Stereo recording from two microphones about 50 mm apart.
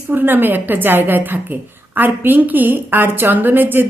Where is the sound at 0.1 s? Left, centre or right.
Right.